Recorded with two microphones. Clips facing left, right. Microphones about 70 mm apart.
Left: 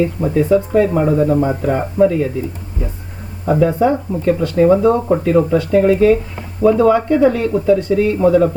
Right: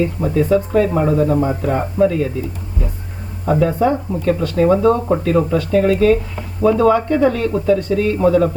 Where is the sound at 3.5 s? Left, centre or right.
Centre.